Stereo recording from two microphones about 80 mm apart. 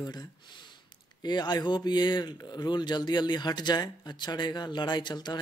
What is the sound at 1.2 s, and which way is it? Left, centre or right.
Speech, left.